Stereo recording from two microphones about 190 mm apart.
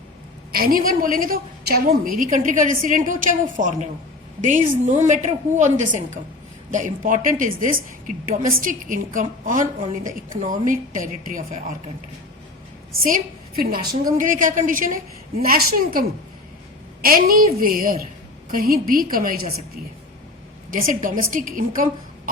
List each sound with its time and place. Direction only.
0.5 s a woman's voice: 50° right (ahead or behind)
13.1 s a woman's voice: 45° right (ahead or behind)
20.7 s a woman's voice: 45° right (ahead or behind)